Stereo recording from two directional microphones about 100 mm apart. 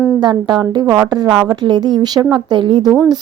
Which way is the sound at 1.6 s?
45° right (ahead or behind).